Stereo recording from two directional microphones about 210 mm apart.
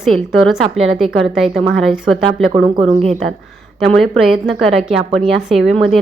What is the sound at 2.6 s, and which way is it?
Speech, 25° right (ahead or behind).